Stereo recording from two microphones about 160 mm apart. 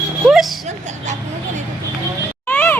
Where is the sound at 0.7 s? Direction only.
50° right (ahead or behind).